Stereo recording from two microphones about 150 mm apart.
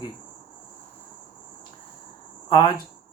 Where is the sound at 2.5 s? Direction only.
30° left (ahead or behind).